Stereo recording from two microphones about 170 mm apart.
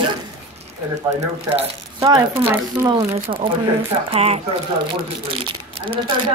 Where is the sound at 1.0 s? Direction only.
40° right (ahead or behind).